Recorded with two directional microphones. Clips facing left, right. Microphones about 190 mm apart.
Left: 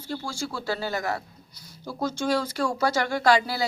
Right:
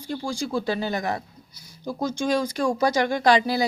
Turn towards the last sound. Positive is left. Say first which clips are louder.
# right 2 dB
turn(degrees=-20)  # may be behind; listen again after turning